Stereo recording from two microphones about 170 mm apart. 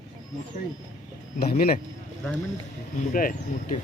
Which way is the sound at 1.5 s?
65° left (ahead or behind).